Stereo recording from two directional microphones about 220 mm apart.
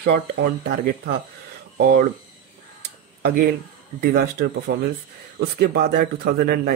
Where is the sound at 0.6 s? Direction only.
50° right (ahead or behind).